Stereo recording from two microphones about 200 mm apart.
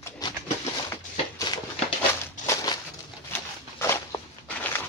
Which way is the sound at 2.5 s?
15° left (ahead or behind).